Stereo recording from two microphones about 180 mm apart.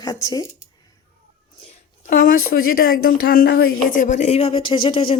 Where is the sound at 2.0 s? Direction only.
50° left (ahead or behind).